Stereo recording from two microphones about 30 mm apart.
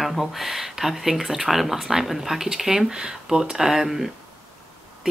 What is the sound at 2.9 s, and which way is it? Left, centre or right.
Speech, right.